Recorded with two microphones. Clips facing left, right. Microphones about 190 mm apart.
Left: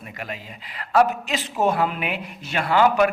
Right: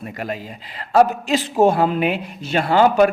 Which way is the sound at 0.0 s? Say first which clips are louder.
Right 7 dB; 40° right (ahead or behind).